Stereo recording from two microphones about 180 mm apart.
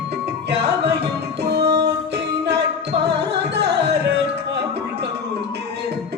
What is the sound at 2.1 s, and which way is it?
Music, 70° right (ahead or behind).